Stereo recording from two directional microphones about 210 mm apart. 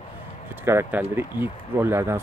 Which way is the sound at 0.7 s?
10° right (ahead or behind).